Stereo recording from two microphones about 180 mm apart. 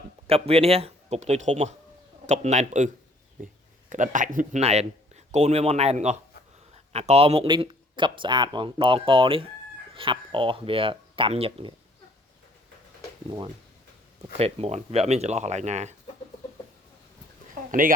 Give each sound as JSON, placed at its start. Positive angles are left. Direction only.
{"t": 0.3, "sound": "speech", "side_deg": -35}
{"t": 14.3, "sound": "speech", "side_deg": -35}
{"t": 17.5, "sound": "a sound", "side_deg": -50}